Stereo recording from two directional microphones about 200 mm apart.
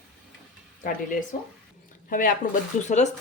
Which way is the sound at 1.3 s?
30° left (ahead or behind).